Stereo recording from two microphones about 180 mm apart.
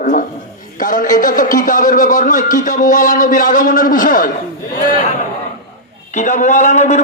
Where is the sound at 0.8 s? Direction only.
45° left (ahead or behind).